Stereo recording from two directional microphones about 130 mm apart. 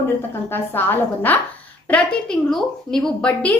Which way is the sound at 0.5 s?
15° left (ahead or behind).